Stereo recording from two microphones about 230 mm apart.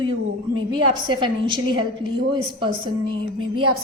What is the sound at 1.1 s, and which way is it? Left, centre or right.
A woman's voice, centre.